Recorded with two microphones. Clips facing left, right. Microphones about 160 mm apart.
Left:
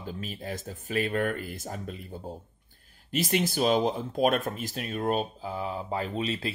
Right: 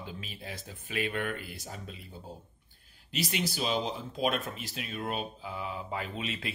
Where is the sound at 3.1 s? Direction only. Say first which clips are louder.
Left 6 dB; 50° left (ahead or behind).